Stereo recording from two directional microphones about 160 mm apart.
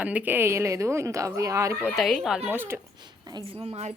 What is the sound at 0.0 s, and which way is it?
Speech, 10° right (ahead or behind).